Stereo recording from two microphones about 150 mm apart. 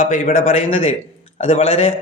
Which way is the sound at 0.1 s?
50° left (ahead or behind).